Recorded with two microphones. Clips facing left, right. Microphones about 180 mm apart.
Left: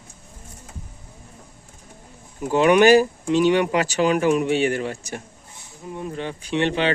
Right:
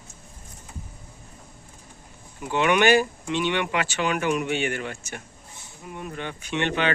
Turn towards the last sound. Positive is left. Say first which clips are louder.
# left 4 dB
turn(degrees=30)  # may be behind; listen again after turning